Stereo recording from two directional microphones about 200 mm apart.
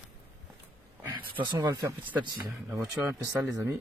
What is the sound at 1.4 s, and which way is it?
Speech, 15° right (ahead or behind).